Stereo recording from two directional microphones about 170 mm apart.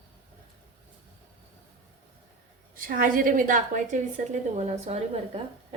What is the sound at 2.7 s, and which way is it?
A woman's voice, 55° right (ahead or behind).